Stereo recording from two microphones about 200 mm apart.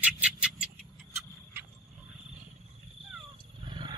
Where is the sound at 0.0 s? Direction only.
5° right (ahead or behind).